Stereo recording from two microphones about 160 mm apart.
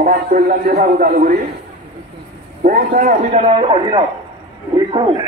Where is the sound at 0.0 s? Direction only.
60° right (ahead or behind).